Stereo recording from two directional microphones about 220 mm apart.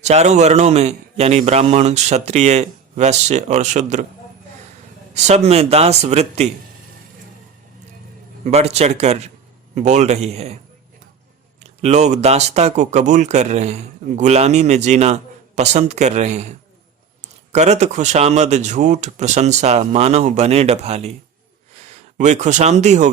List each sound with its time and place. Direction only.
0.0 s speech: 30° right (ahead or behind)
5.1 s a man's voice: 30° right (ahead or behind)
8.4 s a man's voice: 30° right (ahead or behind)
11.6 s speech: 30° right (ahead or behind)
22.2 s speech: 30° right (ahead or behind)